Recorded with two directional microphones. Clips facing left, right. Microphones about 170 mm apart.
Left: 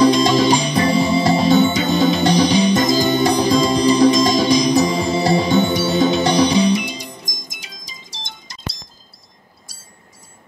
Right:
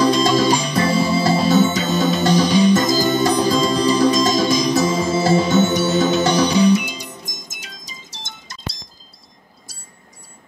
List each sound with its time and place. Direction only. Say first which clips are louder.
0.0 s music: left 2 dB; 20° left (ahead or behind)